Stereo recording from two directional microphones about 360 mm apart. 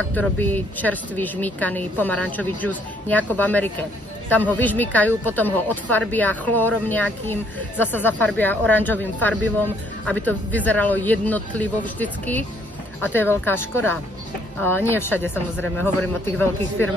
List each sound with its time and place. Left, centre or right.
0.1 s speech: centre